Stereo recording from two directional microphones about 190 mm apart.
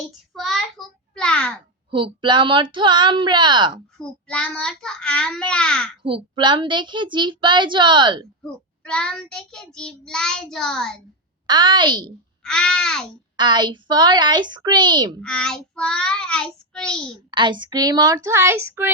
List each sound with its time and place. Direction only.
0.3 s a sound: centre (ahead or behind)
1.9 s speech: 25° right (ahead or behind)
3.9 s child singing: 5° left (ahead or behind)
6.0 s speech: 30° right (ahead or behind)
8.4 s child singing: 5° left (ahead or behind)
11.4 s speech: 25° right (ahead or behind)
12.4 s child singing: 5° left (ahead or behind)
13.3 s speech: 25° right (ahead or behind)
15.2 s child singing: 5° left (ahead or behind)
17.1 s speech: 25° right (ahead or behind)